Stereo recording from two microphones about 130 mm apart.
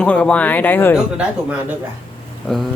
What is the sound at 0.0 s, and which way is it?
Speech, 10° left (ahead or behind).